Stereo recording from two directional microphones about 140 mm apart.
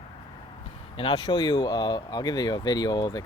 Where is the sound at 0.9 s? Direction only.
40° left (ahead or behind).